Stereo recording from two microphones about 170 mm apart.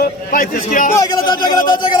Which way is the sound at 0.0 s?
55° left (ahead or behind).